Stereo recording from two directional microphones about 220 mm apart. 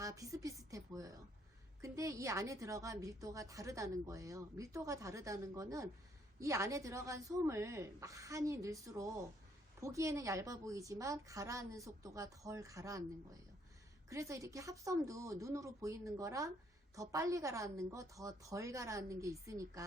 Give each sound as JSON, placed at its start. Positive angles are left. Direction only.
{"t": 0.0, "sound": "a sound", "side_deg": -15}
{"t": 1.8, "sound": "a woman's voice", "side_deg": -15}
{"t": 14.1, "sound": "a woman's voice", "side_deg": -15}